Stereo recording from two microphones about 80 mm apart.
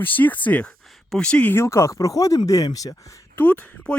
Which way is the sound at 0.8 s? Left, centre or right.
Centre.